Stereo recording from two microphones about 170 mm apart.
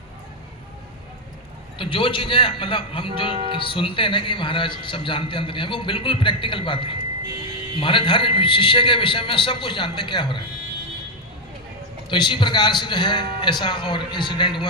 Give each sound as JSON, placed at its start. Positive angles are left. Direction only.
{"t": 1.8, "sound": "a man's voice", "side_deg": 30}
{"t": 12.0, "sound": "a man's voice", "side_deg": 30}